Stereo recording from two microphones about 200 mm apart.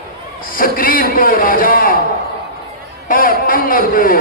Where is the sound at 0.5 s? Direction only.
45° left (ahead or behind).